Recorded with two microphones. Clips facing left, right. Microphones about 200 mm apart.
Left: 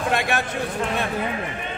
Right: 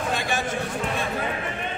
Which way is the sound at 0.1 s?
65° left (ahead or behind).